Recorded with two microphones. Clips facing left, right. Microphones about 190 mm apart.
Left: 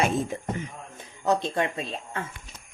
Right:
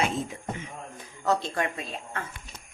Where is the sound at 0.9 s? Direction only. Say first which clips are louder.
Left 2 dB; 20° left (ahead or behind).